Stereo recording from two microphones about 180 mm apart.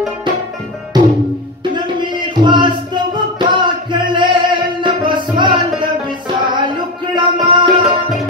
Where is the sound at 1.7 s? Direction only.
25° right (ahead or behind).